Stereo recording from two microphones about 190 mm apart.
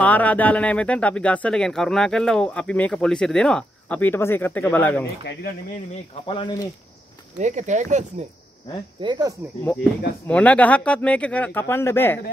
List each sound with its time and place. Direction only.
0.0 s speech: 10° left (ahead or behind)
5.2 s speech: 60° left (ahead or behind)
6.2 s speech: 25° left (ahead or behind)
7.3 s speech: 40° right (ahead or behind)
9.0 s speech: 25° right (ahead or behind)
10.2 s speech: 5° left (ahead or behind)